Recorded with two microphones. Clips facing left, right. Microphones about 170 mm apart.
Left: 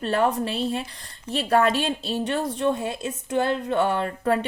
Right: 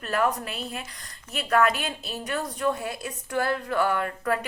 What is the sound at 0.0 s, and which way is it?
A woman's voice, 30° left (ahead or behind).